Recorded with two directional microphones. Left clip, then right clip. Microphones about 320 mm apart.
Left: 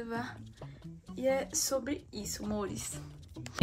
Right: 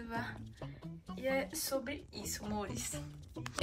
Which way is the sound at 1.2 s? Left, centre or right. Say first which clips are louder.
Left 5 dB; centre.